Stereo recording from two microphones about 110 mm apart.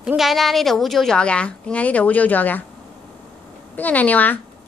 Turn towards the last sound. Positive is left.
turn(degrees=15)  # may be behind; listen again after turning